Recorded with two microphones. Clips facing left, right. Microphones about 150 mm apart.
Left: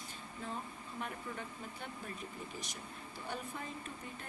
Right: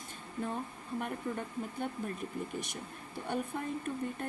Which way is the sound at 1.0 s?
50° right (ahead or behind).